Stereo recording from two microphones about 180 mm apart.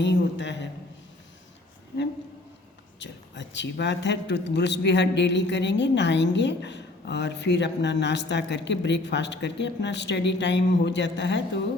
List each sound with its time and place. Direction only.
0.0 s a man's voice: 80° left
3.0 s a man's voice: 80° left